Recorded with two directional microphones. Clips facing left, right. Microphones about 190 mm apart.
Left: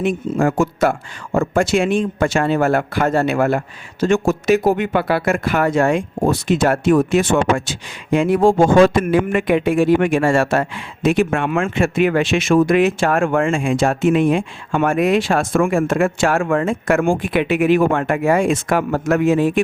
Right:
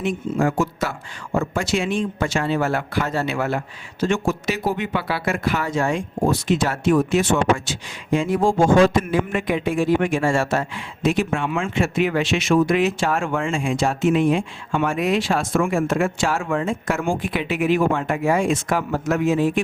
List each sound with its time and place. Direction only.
0.0 s speech: 50° left (ahead or behind)